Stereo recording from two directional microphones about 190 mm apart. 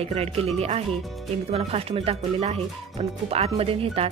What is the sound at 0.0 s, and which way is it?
Speech, 30° right (ahead or behind).